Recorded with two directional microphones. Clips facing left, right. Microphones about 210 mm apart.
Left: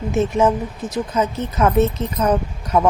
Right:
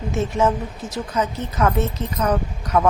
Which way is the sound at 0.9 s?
20° left (ahead or behind).